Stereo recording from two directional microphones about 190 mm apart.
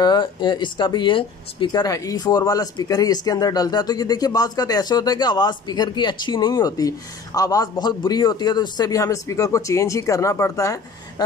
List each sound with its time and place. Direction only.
0.0 s speech: 25° left (ahead or behind)